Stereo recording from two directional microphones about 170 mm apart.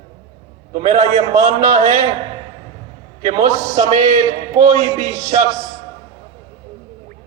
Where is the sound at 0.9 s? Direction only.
40° right (ahead or behind).